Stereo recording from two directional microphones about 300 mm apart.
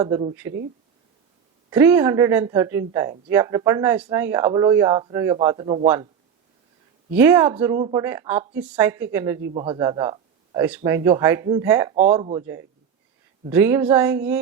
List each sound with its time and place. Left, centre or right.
0.0 s speech: centre
1.7 s speech: centre
7.1 s speech: centre